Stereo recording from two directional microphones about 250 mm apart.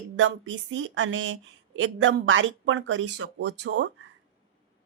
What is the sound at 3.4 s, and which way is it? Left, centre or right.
Speech, right.